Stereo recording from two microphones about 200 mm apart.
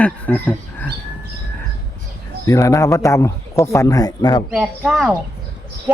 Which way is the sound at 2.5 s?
15° left (ahead or behind).